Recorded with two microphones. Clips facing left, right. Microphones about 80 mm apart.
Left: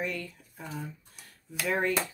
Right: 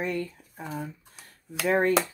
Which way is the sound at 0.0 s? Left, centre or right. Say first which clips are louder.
Right 5 dB; right.